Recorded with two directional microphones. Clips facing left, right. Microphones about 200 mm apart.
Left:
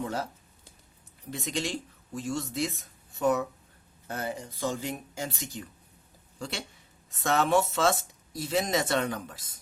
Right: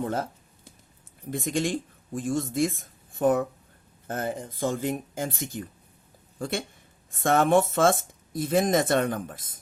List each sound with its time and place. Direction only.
0.0 s speech: 50° right (ahead or behind)
1.3 s speech: 50° right (ahead or behind)